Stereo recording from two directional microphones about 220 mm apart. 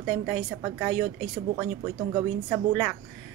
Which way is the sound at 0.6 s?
5° right (ahead or behind).